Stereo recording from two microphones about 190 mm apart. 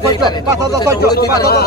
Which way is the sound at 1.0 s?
55° left (ahead or behind).